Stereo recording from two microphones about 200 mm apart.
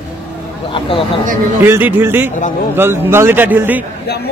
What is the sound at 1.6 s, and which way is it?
A man's voice, 10° right (ahead or behind).